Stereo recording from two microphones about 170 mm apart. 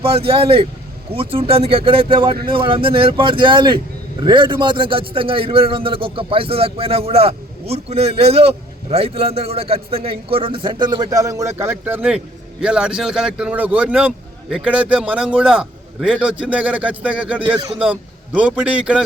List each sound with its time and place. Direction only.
0.0 s a man's voice: 35° right (ahead or behind); by 17.4 s 5° right (ahead or behind)
17.4 s speech: 25° right (ahead or behind)
18.3 s a man's voice: 5° right (ahead or behind)